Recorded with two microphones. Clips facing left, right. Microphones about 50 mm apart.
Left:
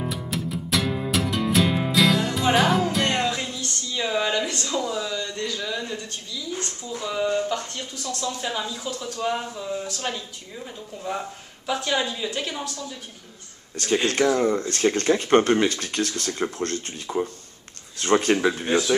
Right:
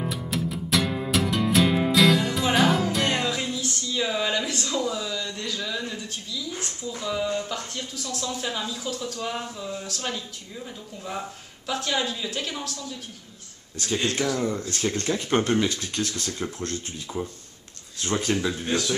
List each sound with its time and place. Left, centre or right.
0.0 s music: centre
3.9 s a sound: centre
7.5 s speech: centre
14.2 s speech: left
15.7 s speech: left
16.3 s speech: left
17.9 s speech: left; by 18.9 s centre